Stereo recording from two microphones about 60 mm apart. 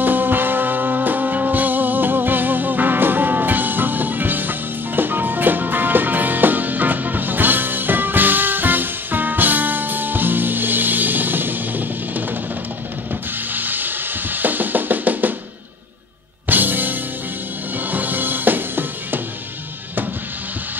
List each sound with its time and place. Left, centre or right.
0.0 s music: right
13.1 s drum: right
16.4 s music: right